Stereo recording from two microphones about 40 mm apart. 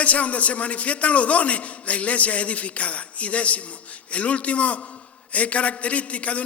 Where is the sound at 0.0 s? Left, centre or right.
Left.